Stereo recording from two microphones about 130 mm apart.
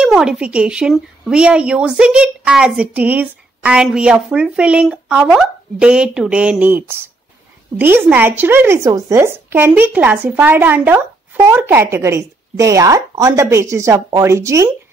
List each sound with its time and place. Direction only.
0.0 s a woman's voice: 5° right (ahead or behind); by 14.7 s 25° right (ahead or behind)